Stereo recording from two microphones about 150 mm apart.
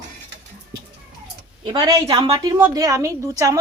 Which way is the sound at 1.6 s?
30° right (ahead or behind).